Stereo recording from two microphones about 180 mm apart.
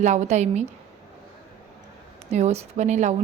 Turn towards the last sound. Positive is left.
turn(degrees=-40)  # may be behind; listen again after turning